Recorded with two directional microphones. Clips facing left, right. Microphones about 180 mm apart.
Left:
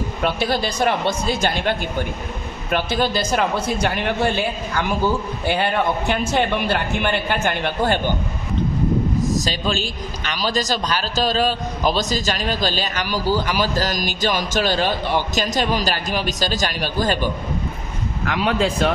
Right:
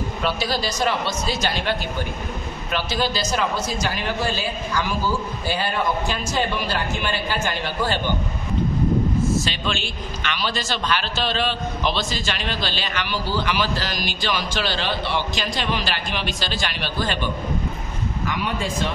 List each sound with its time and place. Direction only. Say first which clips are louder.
0.2 s a man's voice: left 4 dB; 55° left (ahead or behind)
9.4 s a man's voice: left 3 dB; 40° left (ahead or behind)
18.2 s speech: left 7 dB; 70° left (ahead or behind)